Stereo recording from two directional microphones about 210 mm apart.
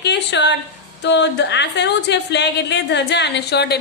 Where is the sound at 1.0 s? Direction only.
55° left (ahead or behind).